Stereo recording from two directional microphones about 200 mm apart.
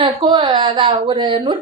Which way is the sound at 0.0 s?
25° right (ahead or behind).